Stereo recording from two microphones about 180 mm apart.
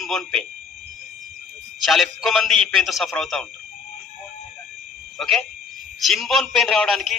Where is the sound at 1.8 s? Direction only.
Centre (ahead or behind).